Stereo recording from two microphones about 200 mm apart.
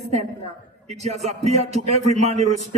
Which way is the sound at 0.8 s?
35° right (ahead or behind).